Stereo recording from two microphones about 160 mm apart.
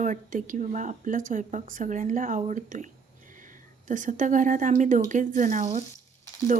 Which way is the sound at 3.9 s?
50° right (ahead or behind).